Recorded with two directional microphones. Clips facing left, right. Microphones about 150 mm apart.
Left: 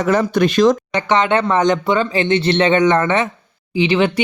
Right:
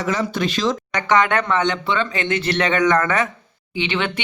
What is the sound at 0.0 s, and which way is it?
Speech, 55° left (ahead or behind).